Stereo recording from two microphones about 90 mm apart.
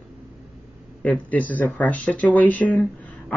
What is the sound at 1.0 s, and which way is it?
Speech, 15° left (ahead or behind).